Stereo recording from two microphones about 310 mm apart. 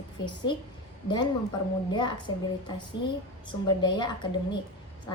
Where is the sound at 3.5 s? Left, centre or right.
Centre.